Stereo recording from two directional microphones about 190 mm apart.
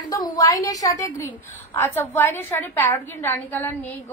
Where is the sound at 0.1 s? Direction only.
20° left (ahead or behind).